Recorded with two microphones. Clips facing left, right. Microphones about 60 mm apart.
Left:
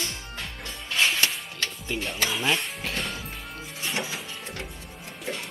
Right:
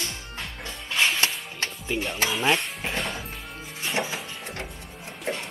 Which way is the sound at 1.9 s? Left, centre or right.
Centre.